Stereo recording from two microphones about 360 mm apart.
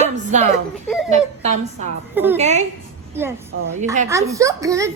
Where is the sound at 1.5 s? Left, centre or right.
Centre.